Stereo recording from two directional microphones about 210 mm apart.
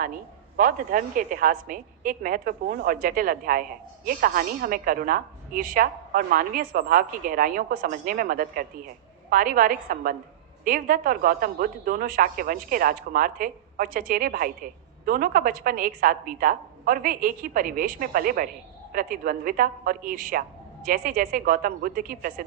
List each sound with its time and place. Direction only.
0.0 s a woman's voice: 40° right (ahead or behind)